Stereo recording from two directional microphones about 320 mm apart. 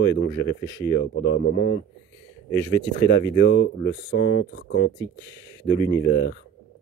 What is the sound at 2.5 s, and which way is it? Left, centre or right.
Speech, centre.